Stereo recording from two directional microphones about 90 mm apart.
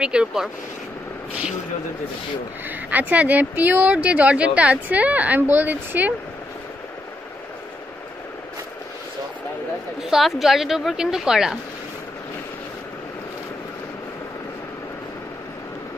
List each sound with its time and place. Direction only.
0.0 s speech: 10° right (ahead or behind)
2.7 s speech: 20° right (ahead or behind)
10.0 s a woman's voice: 5° right (ahead or behind)